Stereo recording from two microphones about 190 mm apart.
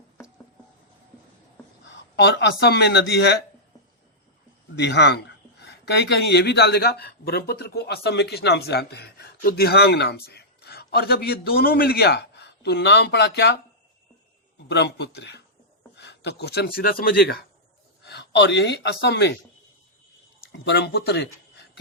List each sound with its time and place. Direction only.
1.8 s speech: 70° left (ahead or behind)
4.8 s a man's voice: 65° left (ahead or behind)
14.7 s a man's voice: 60° left (ahead or behind)
18.0 s speech: 65° left (ahead or behind)
20.4 s speech: 60° left (ahead or behind)